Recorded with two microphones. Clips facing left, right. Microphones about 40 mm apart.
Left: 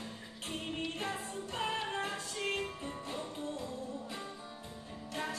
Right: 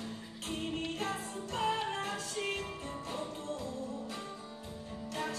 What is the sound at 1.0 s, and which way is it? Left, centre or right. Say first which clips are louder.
Music: right 1 dB; centre.